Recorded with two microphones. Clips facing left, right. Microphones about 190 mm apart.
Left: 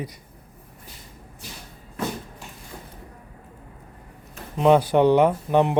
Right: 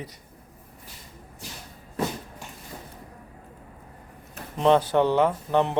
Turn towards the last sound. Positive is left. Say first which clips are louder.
# left 3 dB
turn(degrees=15)  # may be behind; listen again after turning